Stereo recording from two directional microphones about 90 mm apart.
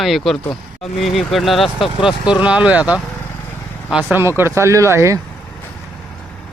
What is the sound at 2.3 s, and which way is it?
Mantra, 15° right (ahead or behind).